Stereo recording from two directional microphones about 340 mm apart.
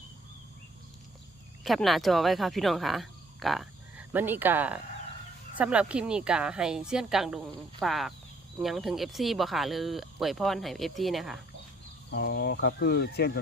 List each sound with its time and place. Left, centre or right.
1.6 s speech: centre
12.1 s speech: left